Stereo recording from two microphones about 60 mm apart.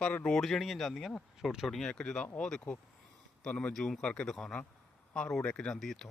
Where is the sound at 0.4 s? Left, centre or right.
Centre.